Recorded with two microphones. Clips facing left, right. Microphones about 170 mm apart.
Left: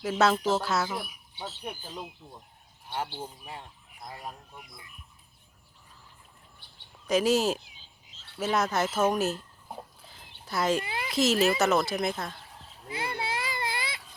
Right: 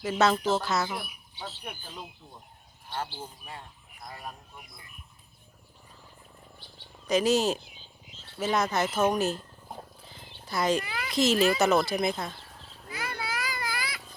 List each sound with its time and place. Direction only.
0.0 s speech: 5° left (ahead or behind)
3.2 s speech: 20° left (ahead or behind)
7.1 s speech: 5° left (ahead or behind)
8.4 s roaring cats: 5° left (ahead or behind)
10.8 s speech: 25° left (ahead or behind)
11.1 s speech: 5° left (ahead or behind)
12.9 s baby cry: 25° left (ahead or behind)